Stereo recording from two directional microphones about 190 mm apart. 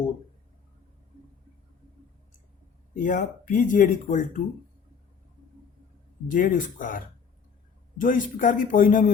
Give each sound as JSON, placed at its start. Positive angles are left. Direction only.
{"t": 2.9, "sound": "speech", "side_deg": 45}
{"t": 6.2, "sound": "speech", "side_deg": 45}